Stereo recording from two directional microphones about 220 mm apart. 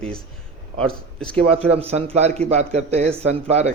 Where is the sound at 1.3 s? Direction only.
25° right (ahead or behind).